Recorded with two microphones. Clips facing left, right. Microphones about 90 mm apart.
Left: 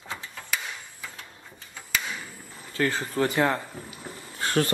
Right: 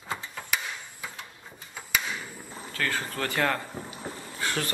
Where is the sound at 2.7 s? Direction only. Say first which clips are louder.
Left 4 dB; 25° left (ahead or behind).